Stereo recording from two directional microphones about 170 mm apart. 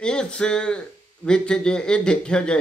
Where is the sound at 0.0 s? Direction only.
5° left (ahead or behind).